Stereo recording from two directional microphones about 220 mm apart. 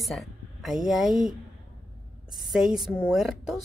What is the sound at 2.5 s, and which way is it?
Speech, centre (ahead or behind).